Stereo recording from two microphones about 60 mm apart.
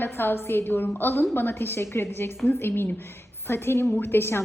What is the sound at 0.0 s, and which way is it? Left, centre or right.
A woman's voice, left.